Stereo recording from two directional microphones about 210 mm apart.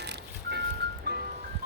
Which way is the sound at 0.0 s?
50° right (ahead or behind).